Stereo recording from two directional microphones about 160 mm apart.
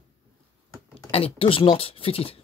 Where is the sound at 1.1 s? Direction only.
35° left (ahead or behind).